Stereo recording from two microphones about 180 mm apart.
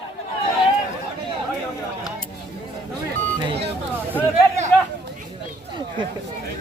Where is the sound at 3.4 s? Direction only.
30° right (ahead or behind).